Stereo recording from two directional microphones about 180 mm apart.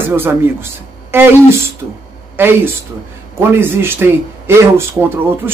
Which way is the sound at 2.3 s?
10° right (ahead or behind).